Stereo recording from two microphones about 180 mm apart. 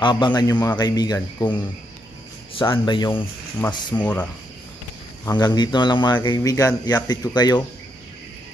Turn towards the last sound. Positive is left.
turn(degrees=25)  # may be behind; listen again after turning